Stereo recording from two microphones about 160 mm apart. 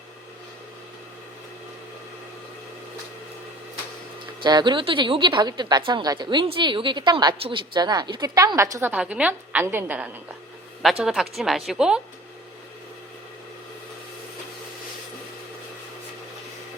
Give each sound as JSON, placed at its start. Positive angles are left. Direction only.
{"t": 4.4, "sound": "a woman's voice", "side_deg": -30}
{"t": 8.9, "sound": "a woman's voice", "side_deg": -10}